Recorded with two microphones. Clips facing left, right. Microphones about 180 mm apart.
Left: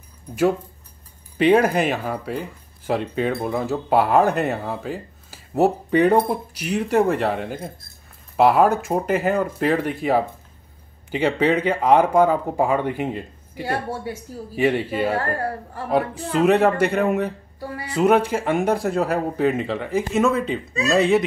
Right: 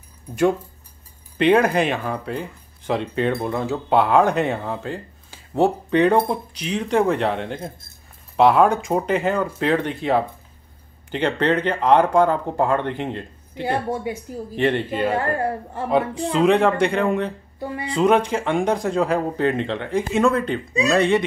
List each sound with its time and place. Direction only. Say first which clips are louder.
1.4 s speech: even; 5° left (ahead or behind)
13.8 s speech: right 3 dB; 15° right (ahead or behind)
14.5 s speech: left 1 dB; 5° left (ahead or behind)
15.1 s a woman's voice: right 2 dB; 20° right (ahead or behind)
15.9 s speech: right 1 dB; 5° left (ahead or behind)